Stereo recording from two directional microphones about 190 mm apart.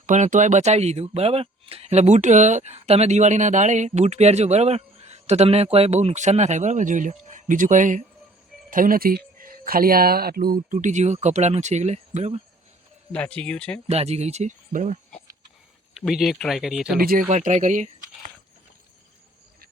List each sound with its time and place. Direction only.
0.0 s speech: 40° right (ahead or behind)
13.1 s speech: 5° left (ahead or behind)
13.8 s speech: 35° right (ahead or behind)
16.0 s speech: centre (ahead or behind)
17.0 s speech: 50° right (ahead or behind)
17.2 s speech: 40° right (ahead or behind)